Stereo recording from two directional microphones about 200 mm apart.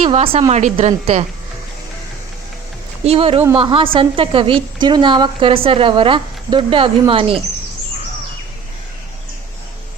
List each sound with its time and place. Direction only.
0.0 s a woman's voice: 25° right (ahead or behind)
3.0 s a woman's voice: 30° right (ahead or behind)